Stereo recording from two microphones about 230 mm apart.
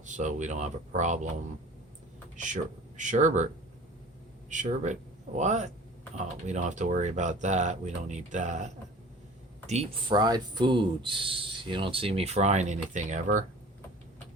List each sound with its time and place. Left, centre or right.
0.0 s speech: right
2.3 s speech: right
4.4 s speech: right
9.6 s speech: right